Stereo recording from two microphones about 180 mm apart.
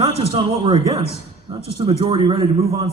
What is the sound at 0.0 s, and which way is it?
A man's voice, 30° right (ahead or behind).